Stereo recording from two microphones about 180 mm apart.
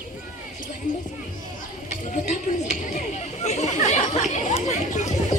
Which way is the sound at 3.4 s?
40° left (ahead or behind).